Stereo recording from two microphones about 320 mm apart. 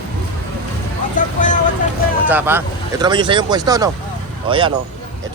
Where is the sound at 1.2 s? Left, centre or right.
Left.